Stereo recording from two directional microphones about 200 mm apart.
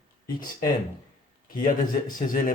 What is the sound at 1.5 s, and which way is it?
Speech, 45° left (ahead or behind).